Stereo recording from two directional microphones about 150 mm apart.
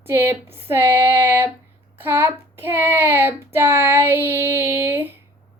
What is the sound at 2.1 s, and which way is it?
Child singing, 15° right (ahead or behind).